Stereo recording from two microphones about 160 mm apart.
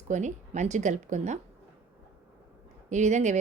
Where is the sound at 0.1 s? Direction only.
50° right (ahead or behind).